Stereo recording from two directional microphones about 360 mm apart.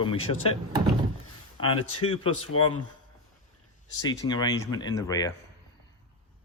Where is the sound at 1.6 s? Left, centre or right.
Left.